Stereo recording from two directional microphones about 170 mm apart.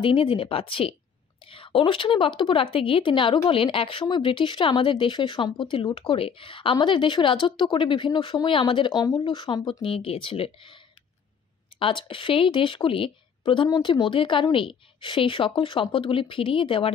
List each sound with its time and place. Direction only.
0.0 s speech: 30° left (ahead or behind)
11.8 s speech: 30° left (ahead or behind)